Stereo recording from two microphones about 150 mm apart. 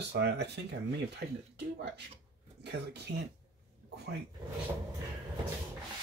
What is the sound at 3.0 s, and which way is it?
Speech, 90° right.